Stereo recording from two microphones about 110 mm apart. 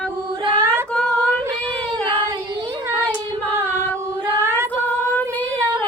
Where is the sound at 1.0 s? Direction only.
10° left (ahead or behind).